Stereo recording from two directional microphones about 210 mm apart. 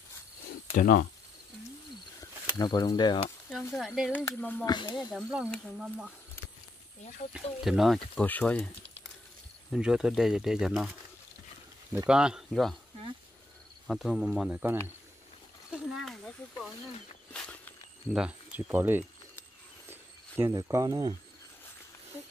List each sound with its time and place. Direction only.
0.7 s speech: 40° left (ahead or behind)
2.1 s snake: 20° left (ahead or behind)
3.4 s speech: centre (ahead or behind)
4.6 s speech: 20° left (ahead or behind)
5.1 s speech: 5° right (ahead or behind)
7.3 s speech: centre (ahead or behind)
9.7 s speech: 5° right (ahead or behind)
12.1 s speech: 5° right (ahead or behind)
13.8 s speech: centre (ahead or behind)
17.3 s a sound: 5° left (ahead or behind)
18.1 s speech: 5° right (ahead or behind)